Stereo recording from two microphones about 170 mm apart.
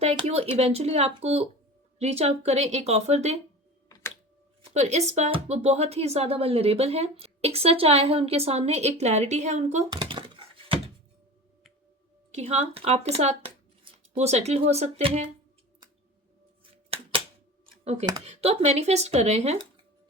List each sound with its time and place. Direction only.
0.0 s speech: 35° right (ahead or behind)
4.7 s speech: 40° right (ahead or behind)
9.9 s a sound: 25° right (ahead or behind)
12.3 s speech: 40° right (ahead or behind)
18.3 s speech: 40° right (ahead or behind)